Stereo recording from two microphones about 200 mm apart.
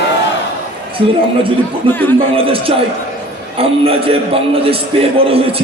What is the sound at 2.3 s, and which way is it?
A man's voice, 30° right (ahead or behind).